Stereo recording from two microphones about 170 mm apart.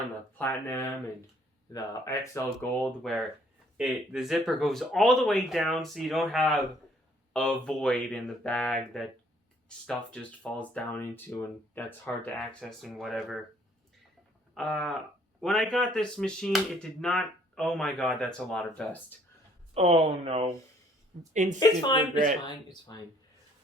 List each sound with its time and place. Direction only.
0.3 s speech: 15° left (ahead or behind)
2.8 s speech: centre (ahead or behind)
14.5 s speech: centre (ahead or behind)
19.7 s speech: 35° right (ahead or behind)
21.6 s speech: 25° left (ahead or behind)